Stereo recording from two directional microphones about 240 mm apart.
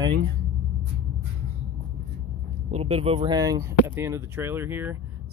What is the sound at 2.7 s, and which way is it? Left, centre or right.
Speech, right.